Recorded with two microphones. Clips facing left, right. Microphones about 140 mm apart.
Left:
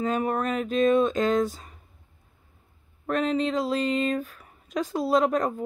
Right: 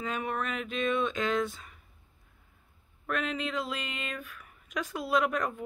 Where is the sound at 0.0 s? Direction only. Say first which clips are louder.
Left 8 dB; 40° left (ahead or behind).